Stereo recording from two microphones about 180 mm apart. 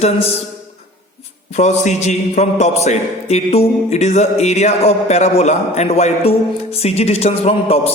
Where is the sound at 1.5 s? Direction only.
40° left (ahead or behind).